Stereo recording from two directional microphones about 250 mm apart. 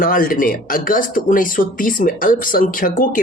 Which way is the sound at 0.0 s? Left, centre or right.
Left.